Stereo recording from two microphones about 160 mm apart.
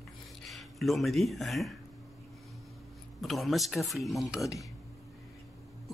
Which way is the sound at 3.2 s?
Centre (ahead or behind).